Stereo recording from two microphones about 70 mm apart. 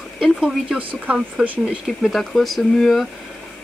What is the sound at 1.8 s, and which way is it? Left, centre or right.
Speech, centre.